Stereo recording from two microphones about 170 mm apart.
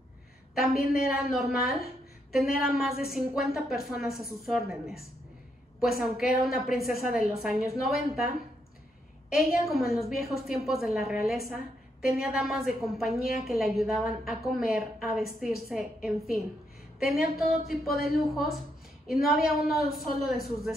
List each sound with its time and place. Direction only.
1.1 s a woman's voice: centre (ahead or behind)
9.3 s a woman's voice: centre (ahead or behind)